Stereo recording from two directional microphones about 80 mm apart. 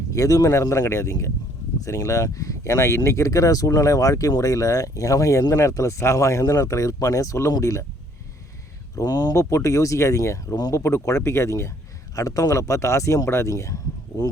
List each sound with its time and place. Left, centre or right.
0.1 s speech: left
9.0 s speech: left
10.8 s speech: left